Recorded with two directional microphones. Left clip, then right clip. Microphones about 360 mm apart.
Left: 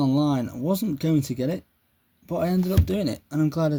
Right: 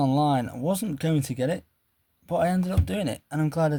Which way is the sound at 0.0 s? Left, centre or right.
Right.